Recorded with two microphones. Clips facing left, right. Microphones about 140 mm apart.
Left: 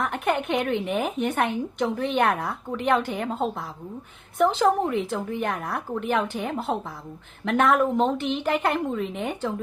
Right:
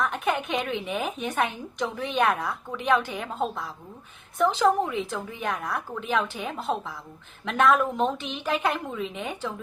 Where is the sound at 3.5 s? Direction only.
60° left (ahead or behind).